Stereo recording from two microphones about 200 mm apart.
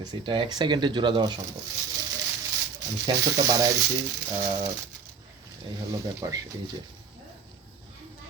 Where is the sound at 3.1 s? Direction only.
15° right (ahead or behind).